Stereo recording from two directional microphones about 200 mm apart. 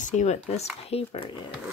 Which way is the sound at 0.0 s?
35° left (ahead or behind).